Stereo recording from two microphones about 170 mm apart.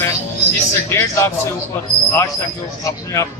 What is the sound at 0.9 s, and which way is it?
Speech, 15° left (ahead or behind).